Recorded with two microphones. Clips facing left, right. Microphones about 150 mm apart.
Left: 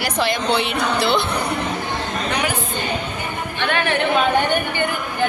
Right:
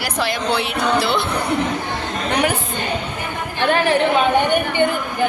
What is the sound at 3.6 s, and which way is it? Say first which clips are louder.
Speech: right 5 dB; 35° right (ahead or behind).